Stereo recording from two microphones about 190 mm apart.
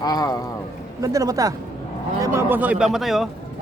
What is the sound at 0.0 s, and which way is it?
Speech, 20° left (ahead or behind).